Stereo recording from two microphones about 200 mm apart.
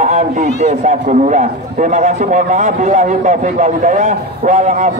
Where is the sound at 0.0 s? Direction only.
35° right (ahead or behind).